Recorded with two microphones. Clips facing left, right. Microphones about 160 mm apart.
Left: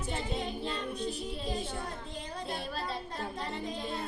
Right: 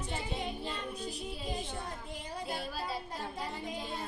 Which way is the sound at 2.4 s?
5° right (ahead or behind).